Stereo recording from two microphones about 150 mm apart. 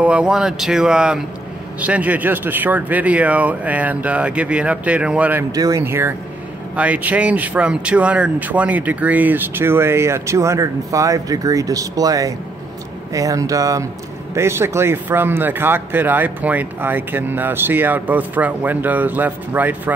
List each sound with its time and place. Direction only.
0.0 s a man's voice: 5° right (ahead or behind)
5.5 s a man's voice: 25° right (ahead or behind)